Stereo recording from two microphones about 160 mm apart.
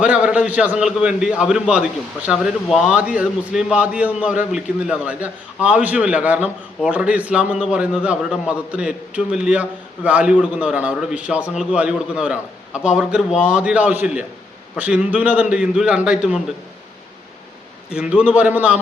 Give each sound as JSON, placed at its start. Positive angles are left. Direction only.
{"t": 0.0, "sound": "a man's voice", "side_deg": -5}
{"t": 17.9, "sound": "a man's voice", "side_deg": -5}